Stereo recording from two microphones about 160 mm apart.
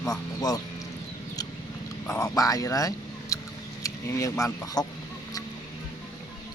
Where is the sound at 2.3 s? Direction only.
20° left (ahead or behind).